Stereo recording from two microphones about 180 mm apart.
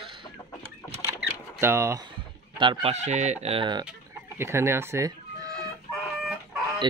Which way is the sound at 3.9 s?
15° right (ahead or behind).